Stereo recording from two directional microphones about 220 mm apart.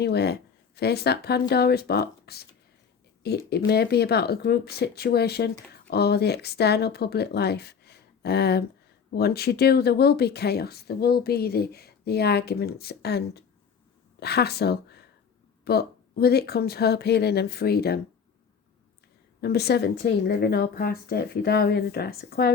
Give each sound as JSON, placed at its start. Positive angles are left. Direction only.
{"t": 0.0, "sound": "speech", "side_deg": 50}
{"t": 19.4, "sound": "speech", "side_deg": 45}